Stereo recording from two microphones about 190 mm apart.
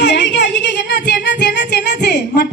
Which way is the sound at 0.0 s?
70° left (ahead or behind).